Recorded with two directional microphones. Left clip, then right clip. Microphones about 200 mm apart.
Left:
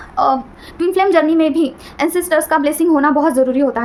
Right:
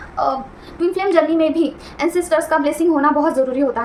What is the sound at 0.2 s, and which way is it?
A woman's voice, 55° left (ahead or behind).